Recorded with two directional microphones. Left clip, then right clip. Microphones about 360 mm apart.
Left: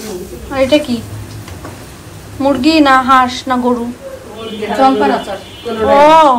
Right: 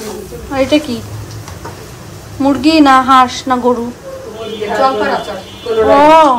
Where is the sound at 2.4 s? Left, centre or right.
Centre.